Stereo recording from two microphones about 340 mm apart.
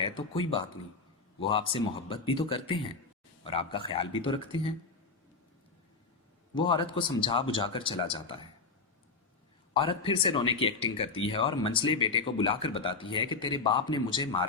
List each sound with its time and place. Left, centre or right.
0.0 s speech: centre
6.5 s speech: centre
9.7 s speech: centre